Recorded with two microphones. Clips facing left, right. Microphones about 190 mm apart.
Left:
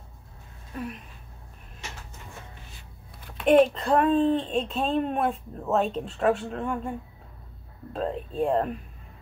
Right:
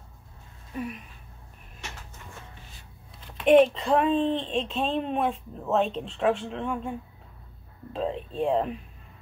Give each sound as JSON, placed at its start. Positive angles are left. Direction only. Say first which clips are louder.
{"t": 0.7, "sound": "speech", "louder": "right 1 dB", "side_deg": -5}
{"t": 3.2, "sound": "speech", "louder": "right 1 dB", "side_deg": 5}